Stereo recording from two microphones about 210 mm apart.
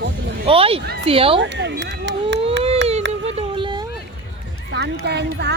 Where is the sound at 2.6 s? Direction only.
60° right (ahead or behind).